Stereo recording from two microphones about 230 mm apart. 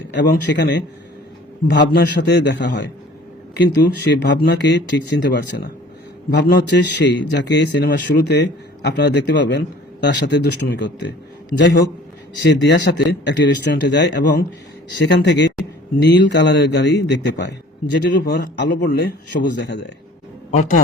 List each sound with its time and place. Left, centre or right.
0.1 s a man's voice: left
20.5 s a man's voice: left